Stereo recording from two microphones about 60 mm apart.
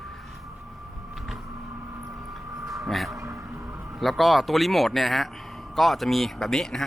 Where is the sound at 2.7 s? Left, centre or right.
Centre.